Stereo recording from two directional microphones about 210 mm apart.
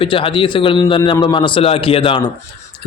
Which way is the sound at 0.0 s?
25° left (ahead or behind).